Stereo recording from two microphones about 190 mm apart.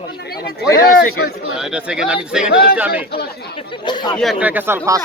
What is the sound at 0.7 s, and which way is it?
Speech, 50° left (ahead or behind).